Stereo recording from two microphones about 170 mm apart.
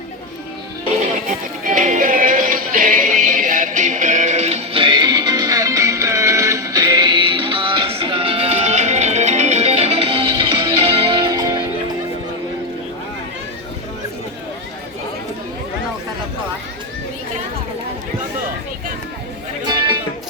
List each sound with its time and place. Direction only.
1.6 s music: 50° right (ahead or behind); by 11.7 s 20° right (ahead or behind)
19.6 s music: 25° right (ahead or behind)